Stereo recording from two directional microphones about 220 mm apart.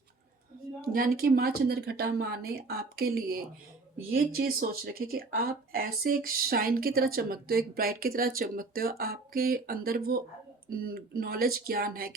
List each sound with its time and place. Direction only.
0.8 s speech: 40° right (ahead or behind)